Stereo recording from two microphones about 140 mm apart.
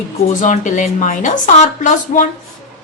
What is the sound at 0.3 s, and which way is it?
A woman's voice, 60° left (ahead or behind).